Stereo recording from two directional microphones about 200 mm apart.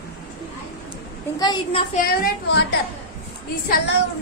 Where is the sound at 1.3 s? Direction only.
20° left (ahead or behind).